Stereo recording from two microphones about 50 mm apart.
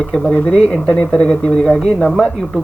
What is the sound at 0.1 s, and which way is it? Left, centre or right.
Speech, centre.